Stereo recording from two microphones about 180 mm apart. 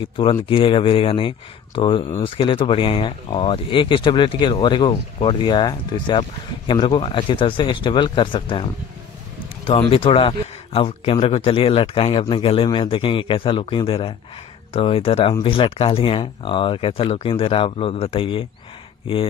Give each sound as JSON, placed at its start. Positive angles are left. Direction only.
{"t": 0.0, "sound": "speech", "side_deg": 30}
{"t": 9.7, "sound": "speech", "side_deg": 30}